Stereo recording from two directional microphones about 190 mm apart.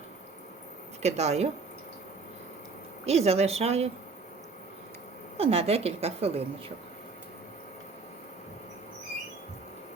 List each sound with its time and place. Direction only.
1.0 s a woman's voice: 35° right (ahead or behind)
3.1 s a woman's voice: 35° right (ahead or behind)
5.4 s a woman's voice: 30° right (ahead or behind)